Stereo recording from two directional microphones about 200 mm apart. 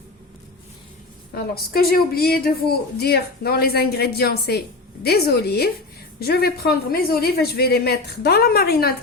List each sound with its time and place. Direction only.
1.4 s speech: 50° left (ahead or behind)